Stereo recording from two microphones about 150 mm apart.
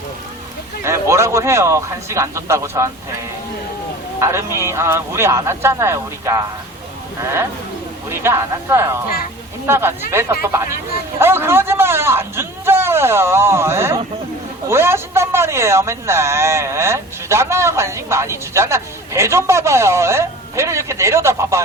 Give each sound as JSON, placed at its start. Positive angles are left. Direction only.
{"t": 0.9, "sound": "speech", "side_deg": -20}
{"t": 4.2, "sound": "speech", "side_deg": -20}